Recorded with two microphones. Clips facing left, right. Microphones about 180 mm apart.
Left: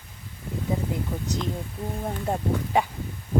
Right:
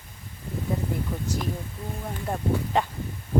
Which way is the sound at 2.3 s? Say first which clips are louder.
Left 3 dB; 25° left (ahead or behind).